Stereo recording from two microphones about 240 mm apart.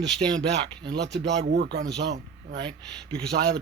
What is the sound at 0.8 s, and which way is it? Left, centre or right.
Speech, right.